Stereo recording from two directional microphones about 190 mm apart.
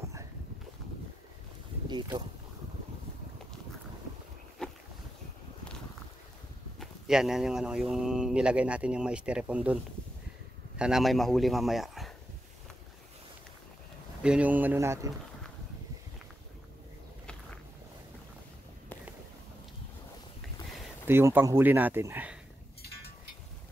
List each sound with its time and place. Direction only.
1.9 s speech: 25° right (ahead or behind)
4.6 s boat: centre (ahead or behind)
6.8 s speech: centre (ahead or behind)
10.8 s speech: centre (ahead or behind)
14.2 s speech: 5° right (ahead or behind)
21.1 s speech: 10° right (ahead or behind)